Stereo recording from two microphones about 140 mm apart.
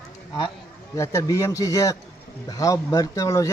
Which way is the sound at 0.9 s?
20° left (ahead or behind).